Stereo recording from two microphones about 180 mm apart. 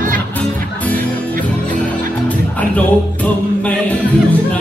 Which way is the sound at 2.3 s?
10° left (ahead or behind).